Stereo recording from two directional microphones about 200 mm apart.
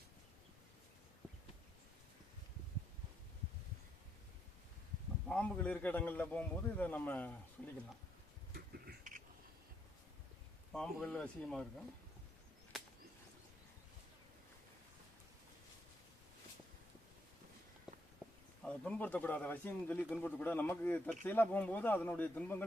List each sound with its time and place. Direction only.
5.3 s speech: 5° left (ahead or behind)
8.5 s a sound: 50° right (ahead or behind)
10.7 s speech: 5° left (ahead or behind)
12.7 s whip: centre (ahead or behind)
18.6 s speech: 5° left (ahead or behind)